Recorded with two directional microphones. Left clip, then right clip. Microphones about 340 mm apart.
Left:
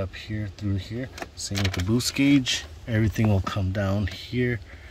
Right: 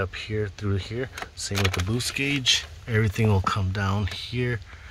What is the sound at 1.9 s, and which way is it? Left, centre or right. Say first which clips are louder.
Speech: left 4 dB; centre.